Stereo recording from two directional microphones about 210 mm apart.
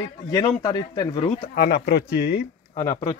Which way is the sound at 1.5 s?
45° left (ahead or behind).